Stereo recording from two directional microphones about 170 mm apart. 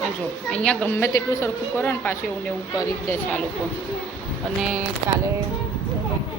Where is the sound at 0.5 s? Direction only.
5° left (ahead or behind).